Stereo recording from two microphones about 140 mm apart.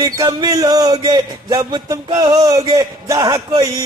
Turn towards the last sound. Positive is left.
turn(degrees=-30)  # may be behind; listen again after turning